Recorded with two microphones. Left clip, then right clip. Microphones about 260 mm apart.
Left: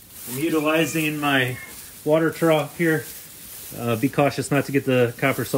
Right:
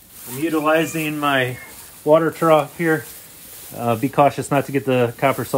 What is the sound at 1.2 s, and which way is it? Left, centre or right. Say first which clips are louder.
Speech: right 4 dB; right.